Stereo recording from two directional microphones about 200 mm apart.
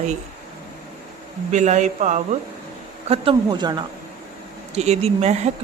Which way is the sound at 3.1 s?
25° right (ahead or behind).